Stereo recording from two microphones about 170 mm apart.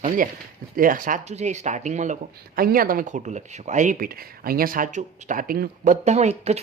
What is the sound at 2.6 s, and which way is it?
Speech, 55° right (ahead or behind).